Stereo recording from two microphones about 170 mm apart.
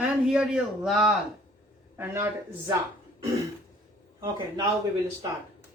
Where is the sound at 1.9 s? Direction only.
15° right (ahead or behind).